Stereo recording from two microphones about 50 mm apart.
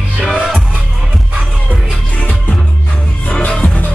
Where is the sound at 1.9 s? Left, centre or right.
Left.